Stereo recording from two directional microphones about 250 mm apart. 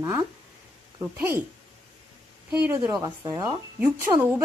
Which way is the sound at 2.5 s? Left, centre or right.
Centre.